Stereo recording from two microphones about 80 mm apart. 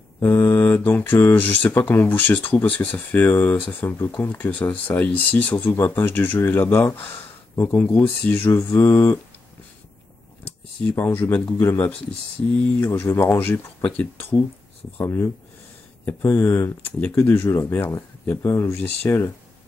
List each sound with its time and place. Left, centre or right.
0.2 s speech: left
8.5 s mantra: left
11.0 s speech: left
15.0 s mantra: left
17.2 s speech: left
18.2 s speech: left
18.5 s mantra: left